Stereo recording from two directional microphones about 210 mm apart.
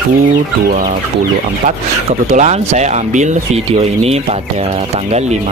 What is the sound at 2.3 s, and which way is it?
Speech, 35° right (ahead or behind).